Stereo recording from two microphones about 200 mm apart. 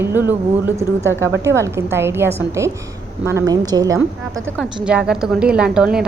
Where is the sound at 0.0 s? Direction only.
10° right (ahead or behind).